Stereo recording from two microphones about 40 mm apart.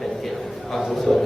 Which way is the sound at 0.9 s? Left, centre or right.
Centre.